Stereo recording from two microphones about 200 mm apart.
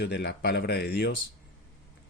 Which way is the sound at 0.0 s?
55° left (ahead or behind).